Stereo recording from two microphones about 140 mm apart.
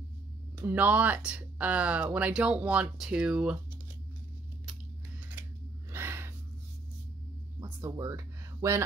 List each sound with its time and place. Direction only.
0.6 s speech: 10° right (ahead or behind)
5.9 s gasp: 20° right (ahead or behind)
7.8 s speech: 20° right (ahead or behind)